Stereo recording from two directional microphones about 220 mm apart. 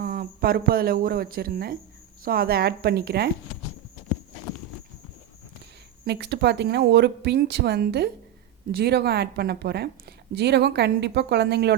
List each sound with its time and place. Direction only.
0.0 s a woman's voice: 40° right (ahead or behind)
6.1 s a woman's voice: 50° right (ahead or behind)